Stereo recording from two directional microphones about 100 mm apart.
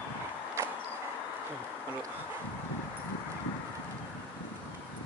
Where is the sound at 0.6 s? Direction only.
25° right (ahead or behind).